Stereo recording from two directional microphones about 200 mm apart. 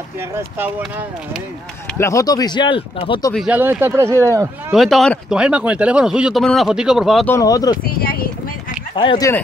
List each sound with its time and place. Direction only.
0.6 s a man's voice: 10° right (ahead or behind)
2.0 s speech: 15° left (ahead or behind)
3.3 s a man's voice: 5° right (ahead or behind)
4.7 s speech: centre (ahead or behind)
7.2 s speech: 15° left (ahead or behind)
7.7 s speech: 45° left (ahead or behind)
8.9 s speech: 25° left (ahead or behind)